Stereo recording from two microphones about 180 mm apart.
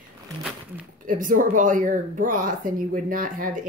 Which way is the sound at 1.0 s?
50° right (ahead or behind).